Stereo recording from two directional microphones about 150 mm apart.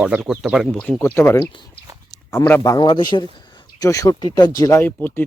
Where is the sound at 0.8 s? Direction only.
10° left (ahead or behind).